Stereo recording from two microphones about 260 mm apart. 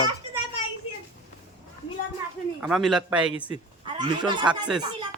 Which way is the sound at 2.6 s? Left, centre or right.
Centre.